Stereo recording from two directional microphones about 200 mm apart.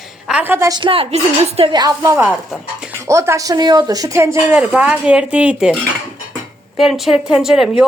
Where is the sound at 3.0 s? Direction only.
15° right (ahead or behind).